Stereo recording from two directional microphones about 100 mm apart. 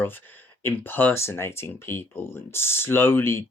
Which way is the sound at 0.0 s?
20° left (ahead or behind).